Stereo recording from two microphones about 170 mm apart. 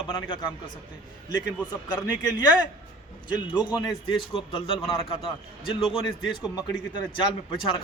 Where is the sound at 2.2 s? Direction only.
25° left (ahead or behind).